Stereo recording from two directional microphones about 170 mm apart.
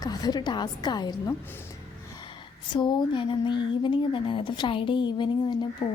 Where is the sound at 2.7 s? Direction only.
25° left (ahead or behind).